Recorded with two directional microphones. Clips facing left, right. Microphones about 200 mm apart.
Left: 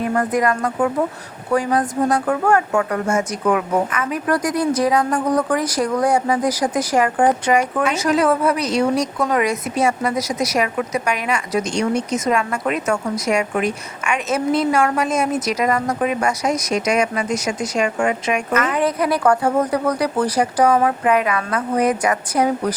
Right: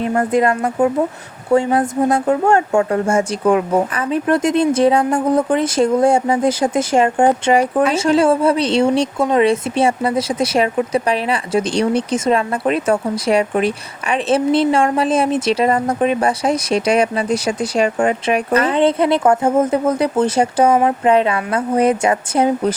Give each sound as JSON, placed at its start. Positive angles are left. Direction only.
{"t": 0.0, "sound": "speech", "side_deg": -25}